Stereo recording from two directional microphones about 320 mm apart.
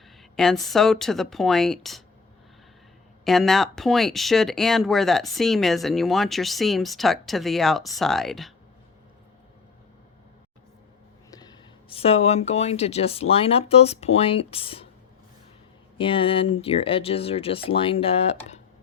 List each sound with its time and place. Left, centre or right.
0.2 s speech: centre
3.2 s speech: centre
11.3 s speech: centre
16.0 s speech: centre